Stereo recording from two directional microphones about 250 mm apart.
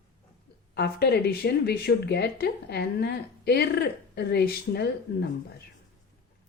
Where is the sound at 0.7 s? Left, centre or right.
Left.